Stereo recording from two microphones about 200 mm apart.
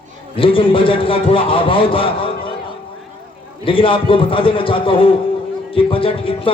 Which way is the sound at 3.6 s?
25° left (ahead or behind).